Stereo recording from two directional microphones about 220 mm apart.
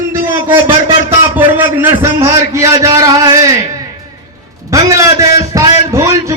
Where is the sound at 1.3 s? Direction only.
10° right (ahead or behind).